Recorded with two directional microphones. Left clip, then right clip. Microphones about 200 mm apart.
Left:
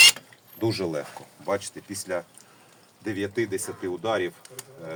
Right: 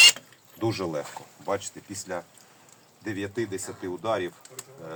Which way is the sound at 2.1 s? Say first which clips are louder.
Left 5 dB; 5° right (ahead or behind).